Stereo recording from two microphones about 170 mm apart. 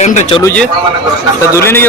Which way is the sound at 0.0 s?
40° left (ahead or behind).